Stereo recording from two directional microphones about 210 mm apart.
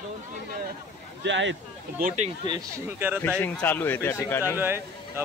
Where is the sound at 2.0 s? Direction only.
30° right (ahead or behind).